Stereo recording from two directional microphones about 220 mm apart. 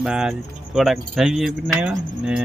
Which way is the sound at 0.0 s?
5° right (ahead or behind).